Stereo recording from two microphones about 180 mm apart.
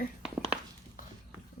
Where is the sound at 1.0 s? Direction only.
50° left (ahead or behind).